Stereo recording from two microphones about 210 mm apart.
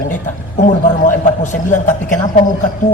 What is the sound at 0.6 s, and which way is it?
A man's voice, 35° left (ahead or behind).